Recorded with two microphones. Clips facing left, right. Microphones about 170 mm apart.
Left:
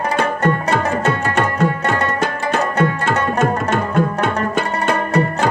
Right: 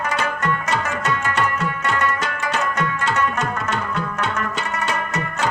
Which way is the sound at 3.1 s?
35° left (ahead or behind).